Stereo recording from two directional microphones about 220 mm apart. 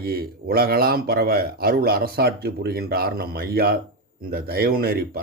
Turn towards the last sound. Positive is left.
turn(degrees=-45)  # may be behind; listen again after turning